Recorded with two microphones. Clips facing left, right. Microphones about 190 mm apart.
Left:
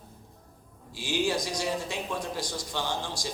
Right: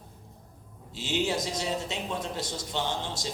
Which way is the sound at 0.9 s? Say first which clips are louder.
Left 1 dB; 20° right (ahead or behind).